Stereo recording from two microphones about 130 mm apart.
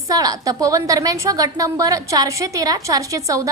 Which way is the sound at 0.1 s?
30° right (ahead or behind).